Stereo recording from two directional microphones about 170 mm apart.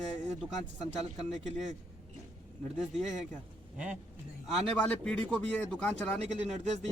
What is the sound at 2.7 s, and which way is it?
Speech, centre (ahead or behind).